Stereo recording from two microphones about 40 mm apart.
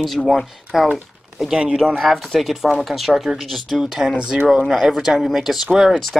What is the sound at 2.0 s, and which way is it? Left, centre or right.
Speech, centre.